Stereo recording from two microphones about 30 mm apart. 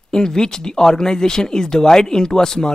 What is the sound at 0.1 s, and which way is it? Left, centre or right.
Speech, left.